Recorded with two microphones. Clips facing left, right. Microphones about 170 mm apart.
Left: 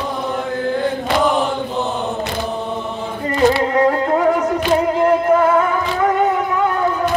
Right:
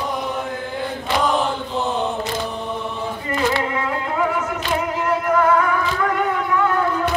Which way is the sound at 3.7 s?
40° left (ahead or behind).